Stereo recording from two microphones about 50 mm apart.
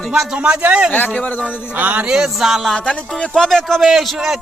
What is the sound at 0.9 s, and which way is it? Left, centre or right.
Speech, left.